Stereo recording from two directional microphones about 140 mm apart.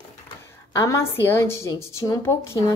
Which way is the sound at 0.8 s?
20° left (ahead or behind).